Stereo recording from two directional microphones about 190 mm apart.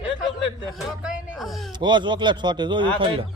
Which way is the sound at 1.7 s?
25° right (ahead or behind).